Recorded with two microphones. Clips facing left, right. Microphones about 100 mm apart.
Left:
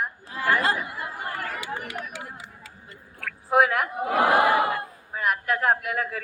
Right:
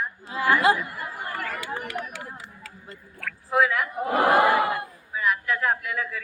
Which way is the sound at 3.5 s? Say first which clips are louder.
Left 2 dB; 60° left (ahead or behind).